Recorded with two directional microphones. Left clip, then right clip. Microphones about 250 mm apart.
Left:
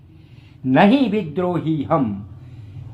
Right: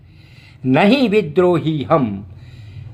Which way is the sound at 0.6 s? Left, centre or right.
Right.